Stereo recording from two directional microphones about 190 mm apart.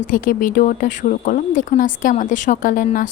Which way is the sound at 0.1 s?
45° left (ahead or behind).